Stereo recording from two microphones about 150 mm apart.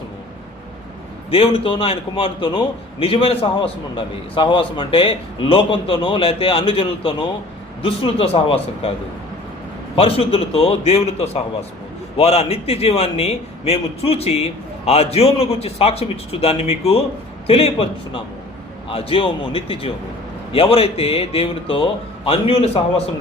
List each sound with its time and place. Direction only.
1.3 s a man's voice: 40° left (ahead or behind)
9.9 s a man's voice: 40° left (ahead or behind)